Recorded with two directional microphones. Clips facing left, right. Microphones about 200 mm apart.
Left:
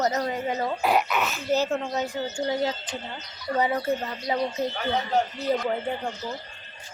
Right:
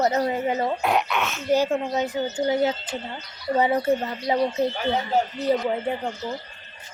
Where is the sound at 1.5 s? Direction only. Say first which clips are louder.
Right 4 dB; 15° right (ahead or behind).